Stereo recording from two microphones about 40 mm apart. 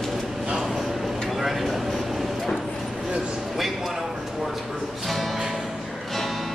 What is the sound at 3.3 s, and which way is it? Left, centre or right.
Music, centre.